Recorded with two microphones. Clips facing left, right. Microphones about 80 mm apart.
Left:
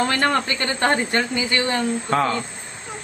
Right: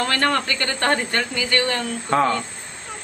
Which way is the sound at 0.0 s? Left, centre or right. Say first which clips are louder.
Left 1 dB; centre.